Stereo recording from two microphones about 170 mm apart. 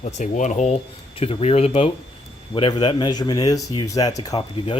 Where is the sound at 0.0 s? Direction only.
45° left (ahead or behind); by 4.4 s 20° left (ahead or behind).